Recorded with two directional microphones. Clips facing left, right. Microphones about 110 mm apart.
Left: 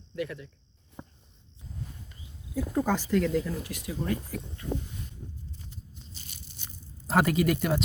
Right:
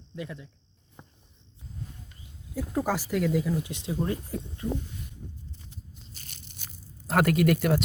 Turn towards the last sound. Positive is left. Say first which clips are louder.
# right 2 dB
turn(degrees=0)  # may be behind; listen again after turning